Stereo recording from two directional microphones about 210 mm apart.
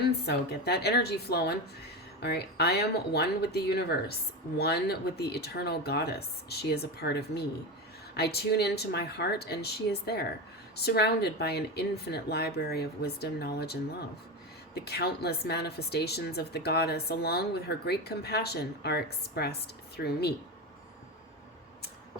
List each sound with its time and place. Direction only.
0.3 s speech: 50° left (ahead or behind)
14.8 s speech: 50° left (ahead or behind)